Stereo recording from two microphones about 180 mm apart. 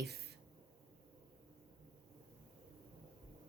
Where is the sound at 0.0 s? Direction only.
65° right (ahead or behind).